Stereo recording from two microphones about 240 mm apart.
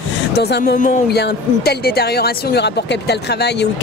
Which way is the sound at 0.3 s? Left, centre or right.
Left.